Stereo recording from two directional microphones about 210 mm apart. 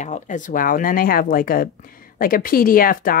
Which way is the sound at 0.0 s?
35° left (ahead or behind).